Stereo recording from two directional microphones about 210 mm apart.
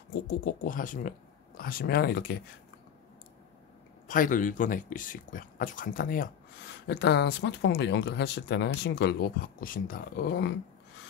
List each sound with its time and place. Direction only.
0.3 s speech: 40° left (ahead or behind)
4.1 s speech: 40° left (ahead or behind)